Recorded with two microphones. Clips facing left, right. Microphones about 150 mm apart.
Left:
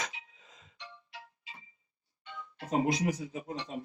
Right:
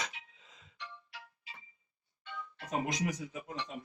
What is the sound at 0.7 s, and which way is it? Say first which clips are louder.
Music: even; 25° left (ahead or behind).